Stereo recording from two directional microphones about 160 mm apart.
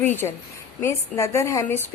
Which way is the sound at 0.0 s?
15° left (ahead or behind).